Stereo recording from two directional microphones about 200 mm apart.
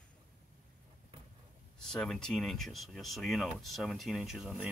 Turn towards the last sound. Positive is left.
turn(degrees=-5)  # may be behind; listen again after turning